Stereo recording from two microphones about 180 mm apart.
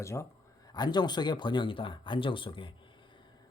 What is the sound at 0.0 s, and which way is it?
Speech, 15° left (ahead or behind).